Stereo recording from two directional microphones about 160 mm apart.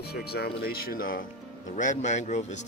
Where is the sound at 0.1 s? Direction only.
80° left; by 1.2 s 65° left (ahead or behind).